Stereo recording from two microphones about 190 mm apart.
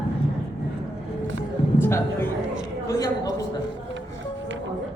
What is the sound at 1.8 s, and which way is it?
Speech, 10° left (ahead or behind).